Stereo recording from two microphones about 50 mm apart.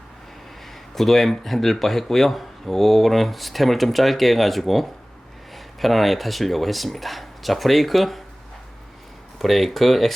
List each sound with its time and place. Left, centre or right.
0.9 s speech: centre
9.4 s speech: centre